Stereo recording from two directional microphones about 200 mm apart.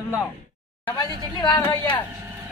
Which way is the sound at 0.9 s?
20° left (ahead or behind).